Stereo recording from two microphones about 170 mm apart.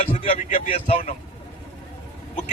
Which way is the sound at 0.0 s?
40° left (ahead or behind).